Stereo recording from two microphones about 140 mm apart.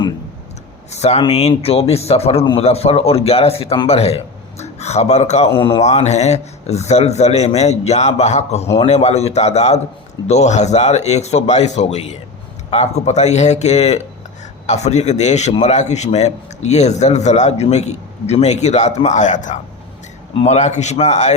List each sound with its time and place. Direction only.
0.9 s a sound: 50° left (ahead or behind)
1.3 s a man's voice: 50° left (ahead or behind)
5.8 s a man's voice: 55° left (ahead or behind)
20.3 s a man's voice: 50° left (ahead or behind)